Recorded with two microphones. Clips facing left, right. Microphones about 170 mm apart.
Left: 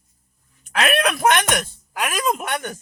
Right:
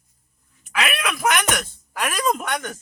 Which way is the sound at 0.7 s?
40° left (ahead or behind).